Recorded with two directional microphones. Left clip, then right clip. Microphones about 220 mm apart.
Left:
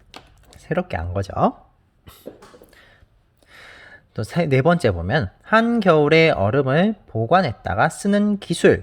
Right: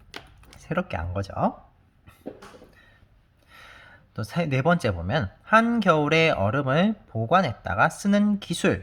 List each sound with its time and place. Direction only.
0.5 s speech: 25° left (ahead or behind)
3.5 s speech: 30° left (ahead or behind)